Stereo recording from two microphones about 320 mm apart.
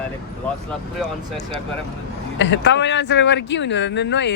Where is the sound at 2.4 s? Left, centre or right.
Left.